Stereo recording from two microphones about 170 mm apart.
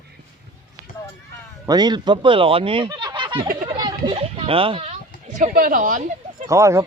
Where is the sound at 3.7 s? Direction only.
30° right (ahead or behind).